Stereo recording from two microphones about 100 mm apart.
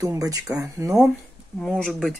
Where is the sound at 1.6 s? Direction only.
5° left (ahead or behind).